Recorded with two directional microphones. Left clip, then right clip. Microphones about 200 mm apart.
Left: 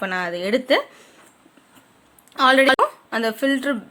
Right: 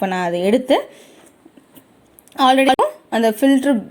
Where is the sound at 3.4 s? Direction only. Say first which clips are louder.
Right 5 dB; 10° right (ahead or behind).